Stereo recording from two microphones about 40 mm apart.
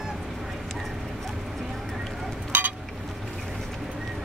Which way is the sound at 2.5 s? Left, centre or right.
Right.